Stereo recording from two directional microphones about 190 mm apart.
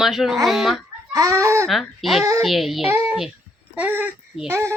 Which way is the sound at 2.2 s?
15° right (ahead or behind).